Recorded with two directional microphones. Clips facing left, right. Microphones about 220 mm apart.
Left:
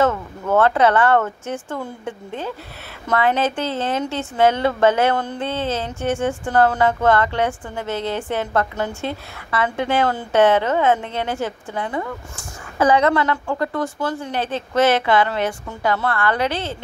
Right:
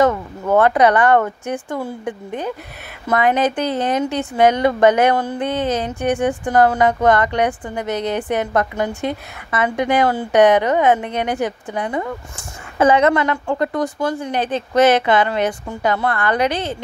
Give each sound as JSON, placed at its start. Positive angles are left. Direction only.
{"t": 0.0, "sound": "a woman's voice", "side_deg": -15}